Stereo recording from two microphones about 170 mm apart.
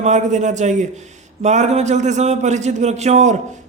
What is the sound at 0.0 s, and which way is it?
A man's voice, 45° right (ahead or behind).